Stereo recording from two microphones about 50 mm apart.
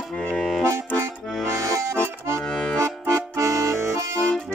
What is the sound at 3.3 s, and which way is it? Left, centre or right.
Music, right.